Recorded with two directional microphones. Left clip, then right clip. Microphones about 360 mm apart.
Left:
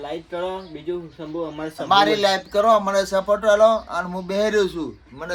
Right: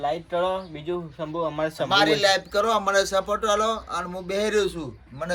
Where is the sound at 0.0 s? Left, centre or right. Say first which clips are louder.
Right 3 dB; centre.